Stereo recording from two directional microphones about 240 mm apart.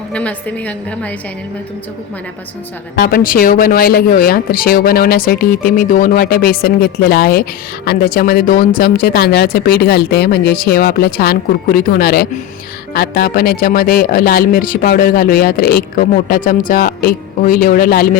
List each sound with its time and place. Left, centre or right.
0.1 s a woman's voice: centre
2.9 s speech: left